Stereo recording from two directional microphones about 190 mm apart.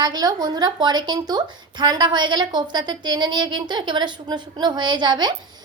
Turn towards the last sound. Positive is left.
turn(degrees=-25)  # may be behind; listen again after turning